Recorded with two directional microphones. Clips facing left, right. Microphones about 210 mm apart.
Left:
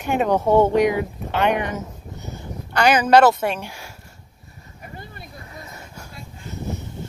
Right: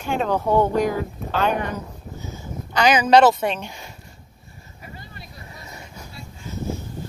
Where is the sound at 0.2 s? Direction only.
20° left (ahead or behind).